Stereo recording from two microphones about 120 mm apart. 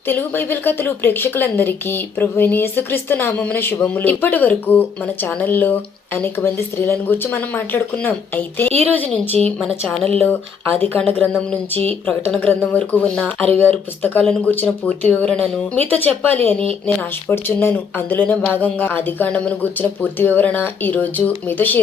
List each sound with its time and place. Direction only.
0.1 s a woman's voice: 15° left (ahead or behind)
10.8 s speech: 15° left (ahead or behind)